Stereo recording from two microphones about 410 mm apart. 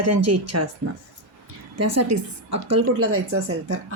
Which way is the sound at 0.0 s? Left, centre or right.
Right.